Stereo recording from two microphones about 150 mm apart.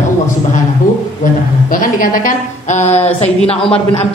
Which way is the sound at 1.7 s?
70° left (ahead or behind).